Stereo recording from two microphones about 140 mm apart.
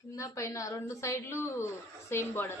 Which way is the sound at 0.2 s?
20° left (ahead or behind).